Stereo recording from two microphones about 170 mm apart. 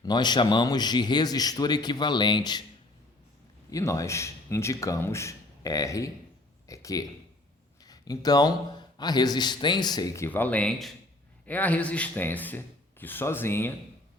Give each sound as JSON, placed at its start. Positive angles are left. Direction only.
{"t": 0.0, "sound": "a man's voice", "side_deg": 25}
{"t": 3.7, "sound": "a man's voice", "side_deg": 20}